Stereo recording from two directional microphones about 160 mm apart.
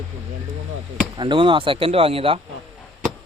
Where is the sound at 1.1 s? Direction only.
30° right (ahead or behind).